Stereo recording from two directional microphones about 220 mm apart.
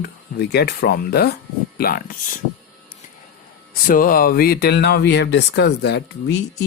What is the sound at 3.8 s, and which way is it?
Speech, 40° left (ahead or behind).